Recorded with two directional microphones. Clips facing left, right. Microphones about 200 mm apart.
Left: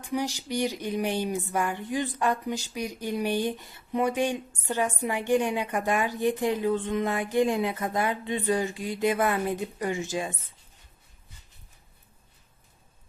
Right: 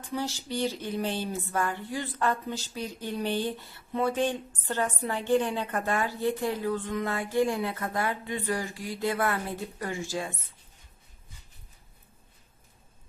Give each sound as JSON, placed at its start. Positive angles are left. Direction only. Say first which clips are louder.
{"t": 0.0, "sound": "speech", "louder": "left 3 dB", "side_deg": 15}